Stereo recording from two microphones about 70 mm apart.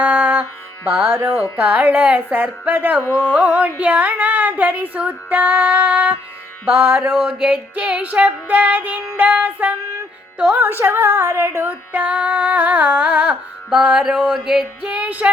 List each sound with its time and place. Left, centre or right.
0.0 s music: centre
0.9 s speech: right
1.5 s female singing: right
6.7 s speech: right
7.3 s female singing: right
10.3 s speech: centre
10.6 s speech: right
11.5 s female singing: right
14.3 s a sound: centre
14.8 s female singing: centre